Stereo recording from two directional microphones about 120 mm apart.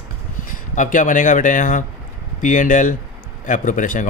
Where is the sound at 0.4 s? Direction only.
90° left.